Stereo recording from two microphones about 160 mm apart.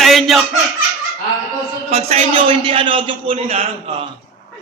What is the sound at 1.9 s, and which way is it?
A man's voice, 40° right (ahead or behind).